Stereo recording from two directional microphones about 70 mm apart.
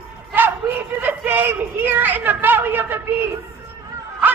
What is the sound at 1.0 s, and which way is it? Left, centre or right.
Speech, right.